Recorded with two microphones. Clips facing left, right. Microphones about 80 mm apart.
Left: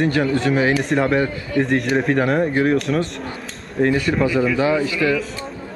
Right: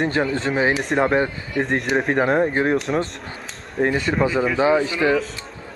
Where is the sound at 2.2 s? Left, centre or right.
Right.